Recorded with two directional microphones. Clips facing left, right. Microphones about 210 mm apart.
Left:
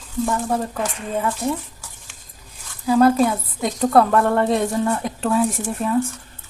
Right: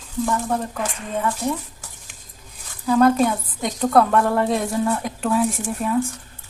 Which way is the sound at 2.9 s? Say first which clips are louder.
Left 1 dB; 5° left (ahead or behind).